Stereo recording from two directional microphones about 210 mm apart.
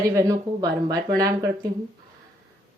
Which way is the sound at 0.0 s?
15° right (ahead or behind).